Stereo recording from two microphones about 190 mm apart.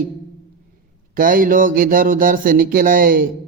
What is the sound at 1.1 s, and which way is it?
Speech, 45° right (ahead or behind).